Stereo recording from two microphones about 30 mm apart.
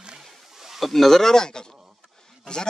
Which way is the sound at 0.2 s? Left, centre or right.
Centre.